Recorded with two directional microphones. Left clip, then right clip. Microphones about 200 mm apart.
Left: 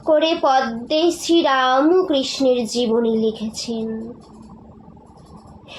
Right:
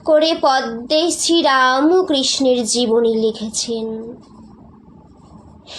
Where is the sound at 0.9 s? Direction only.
30° right (ahead or behind).